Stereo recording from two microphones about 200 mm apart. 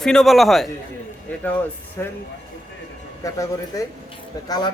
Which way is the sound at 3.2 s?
15° left (ahead or behind).